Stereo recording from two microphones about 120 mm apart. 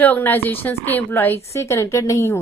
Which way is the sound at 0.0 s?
15° left (ahead or behind).